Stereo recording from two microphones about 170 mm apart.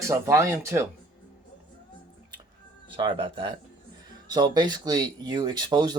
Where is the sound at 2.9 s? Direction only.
30° right (ahead or behind).